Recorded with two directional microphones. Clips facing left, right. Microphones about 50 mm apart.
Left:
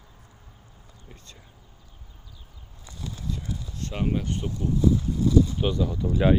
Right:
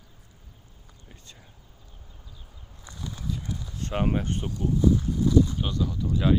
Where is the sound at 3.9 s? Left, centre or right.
Right.